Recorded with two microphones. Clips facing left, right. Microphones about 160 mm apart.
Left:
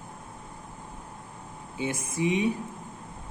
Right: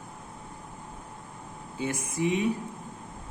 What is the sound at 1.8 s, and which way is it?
Speech, 20° left (ahead or behind).